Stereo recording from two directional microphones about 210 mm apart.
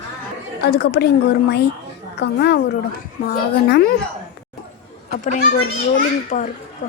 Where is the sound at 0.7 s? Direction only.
50° left (ahead or behind).